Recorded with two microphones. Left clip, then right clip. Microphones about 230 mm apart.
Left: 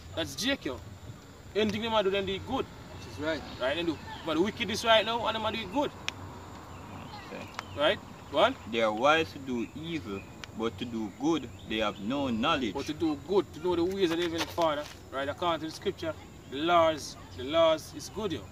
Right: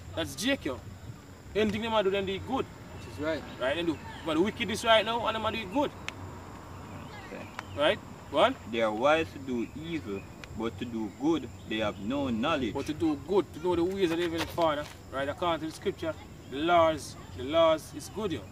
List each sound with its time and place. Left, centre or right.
0.1 s speech: centre
6.1 s a sound: left
7.7 s speech: centre
8.7 s speech: left
12.7 s speech: centre